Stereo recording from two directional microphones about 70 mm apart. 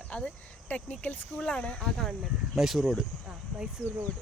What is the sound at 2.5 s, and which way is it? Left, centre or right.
Speech, centre.